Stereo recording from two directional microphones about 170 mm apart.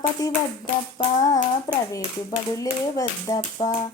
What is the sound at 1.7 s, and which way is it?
Hands, 20° left (ahead or behind).